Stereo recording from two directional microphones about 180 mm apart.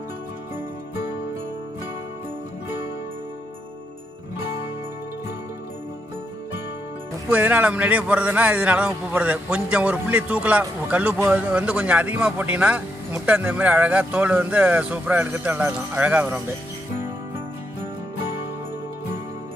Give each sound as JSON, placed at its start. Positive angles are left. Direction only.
{"t": 7.2, "sound": "a man's voice", "side_deg": -10}